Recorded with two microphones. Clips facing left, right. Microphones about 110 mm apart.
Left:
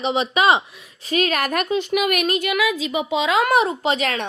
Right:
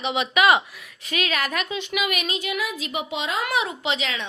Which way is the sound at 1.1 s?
40° left (ahead or behind).